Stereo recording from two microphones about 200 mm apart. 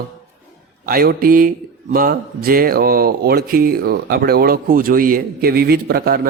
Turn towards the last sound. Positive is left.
turn(degrees=-50)  # may be behind; listen again after turning